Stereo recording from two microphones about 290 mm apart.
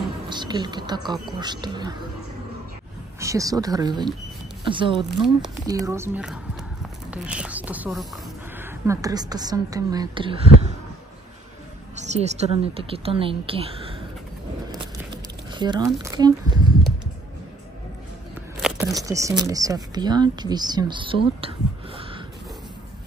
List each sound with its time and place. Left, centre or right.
0.3 s a woman's voice: centre
3.2 s a woman's voice: centre
11.9 s a woman's voice: right
14.7 s a sound: centre
18.6 s speech: centre